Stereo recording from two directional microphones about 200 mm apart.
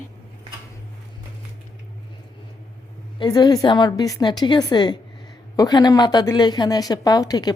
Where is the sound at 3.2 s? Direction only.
20° left (ahead or behind).